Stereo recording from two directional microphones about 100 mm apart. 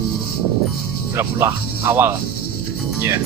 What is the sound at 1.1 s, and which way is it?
Speech, 25° right (ahead or behind).